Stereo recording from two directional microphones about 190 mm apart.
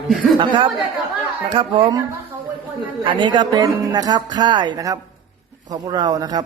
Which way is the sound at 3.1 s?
25° right (ahead or behind).